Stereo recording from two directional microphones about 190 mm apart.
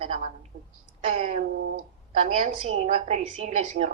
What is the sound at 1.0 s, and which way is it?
Speech, 35° right (ahead or behind).